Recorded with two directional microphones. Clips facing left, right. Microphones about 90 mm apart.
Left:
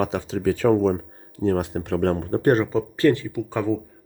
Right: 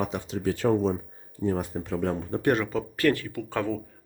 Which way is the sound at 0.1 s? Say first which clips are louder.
Left 6 dB; 90° left.